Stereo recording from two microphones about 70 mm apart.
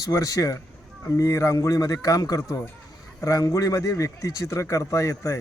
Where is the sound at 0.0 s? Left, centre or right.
Left.